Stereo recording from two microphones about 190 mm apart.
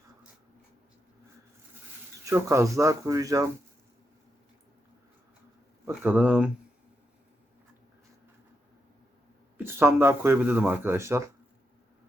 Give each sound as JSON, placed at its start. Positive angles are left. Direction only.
{"t": 2.2, "sound": "speech", "side_deg": -15}
{"t": 6.0, "sound": "speech", "side_deg": -10}
{"t": 9.6, "sound": "speech", "side_deg": -10}